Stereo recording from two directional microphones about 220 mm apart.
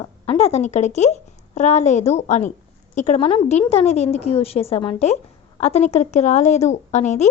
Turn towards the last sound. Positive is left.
turn(degrees=30)  # may be behind; listen again after turning